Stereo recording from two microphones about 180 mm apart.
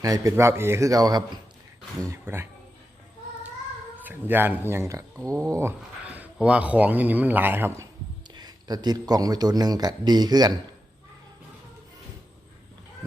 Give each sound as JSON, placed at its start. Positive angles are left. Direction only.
{"t": 0.0, "sound": "speech", "side_deg": -20}
{"t": 4.0, "sound": "a man's voice", "side_deg": -10}